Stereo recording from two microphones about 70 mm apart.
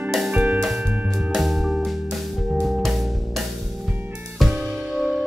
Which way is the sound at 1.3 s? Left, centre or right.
Centre.